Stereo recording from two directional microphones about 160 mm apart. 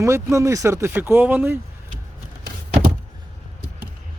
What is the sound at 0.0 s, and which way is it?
Speech, 20° right (ahead or behind).